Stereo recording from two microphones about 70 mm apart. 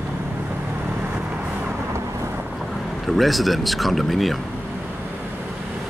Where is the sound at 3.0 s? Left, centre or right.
Centre.